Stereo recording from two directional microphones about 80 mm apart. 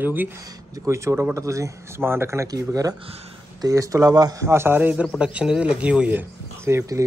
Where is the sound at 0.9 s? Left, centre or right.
Right.